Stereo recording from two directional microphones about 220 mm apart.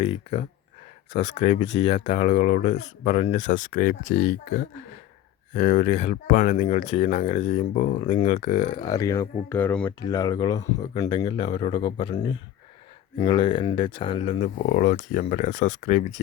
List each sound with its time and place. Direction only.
0.0 s speech: 30° left (ahead or behind)